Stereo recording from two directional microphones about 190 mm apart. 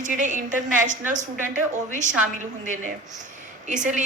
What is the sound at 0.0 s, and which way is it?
A woman's voice, 40° right (ahead or behind).